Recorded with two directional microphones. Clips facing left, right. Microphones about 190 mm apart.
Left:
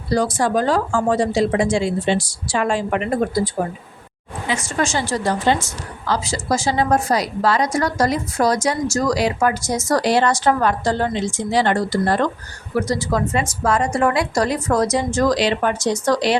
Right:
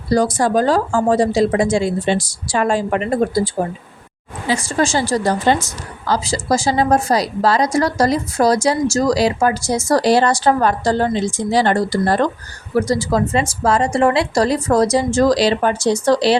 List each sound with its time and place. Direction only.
0.1 s a woman's voice: 40° right (ahead or behind)